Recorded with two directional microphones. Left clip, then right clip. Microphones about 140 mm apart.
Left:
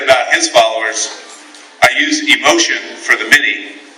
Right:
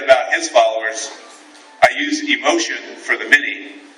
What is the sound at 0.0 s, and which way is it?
Music, centre (ahead or behind).